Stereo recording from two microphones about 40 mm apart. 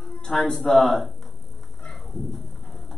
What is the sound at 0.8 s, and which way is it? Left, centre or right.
Speech, centre.